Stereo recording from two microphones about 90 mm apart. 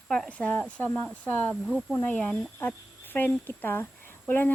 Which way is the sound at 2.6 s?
20° left (ahead or behind).